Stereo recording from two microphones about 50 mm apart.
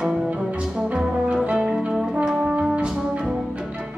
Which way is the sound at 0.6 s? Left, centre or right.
Centre.